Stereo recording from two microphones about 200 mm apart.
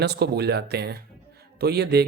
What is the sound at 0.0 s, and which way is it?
Speech, 55° right (ahead or behind).